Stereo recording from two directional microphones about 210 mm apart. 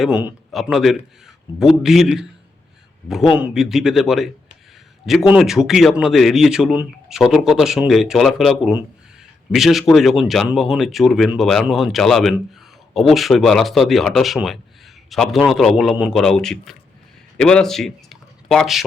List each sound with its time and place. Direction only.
0.0 s speech: 5° right (ahead or behind)
3.3 s speech: 5° right (ahead or behind)